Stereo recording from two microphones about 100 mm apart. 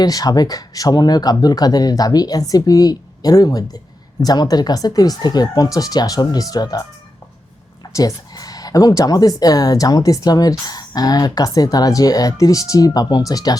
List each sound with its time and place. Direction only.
0.0 s speech: 40° left (ahead or behind)
7.9 s speech: 35° left (ahead or behind)